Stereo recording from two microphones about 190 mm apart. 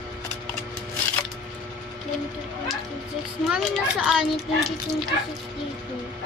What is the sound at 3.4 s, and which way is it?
A child's voice, 5° right (ahead or behind).